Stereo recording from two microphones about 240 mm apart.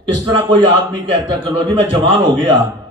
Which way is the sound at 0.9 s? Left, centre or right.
Centre.